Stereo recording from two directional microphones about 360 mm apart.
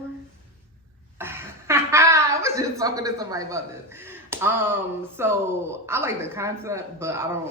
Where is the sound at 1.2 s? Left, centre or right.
Centre.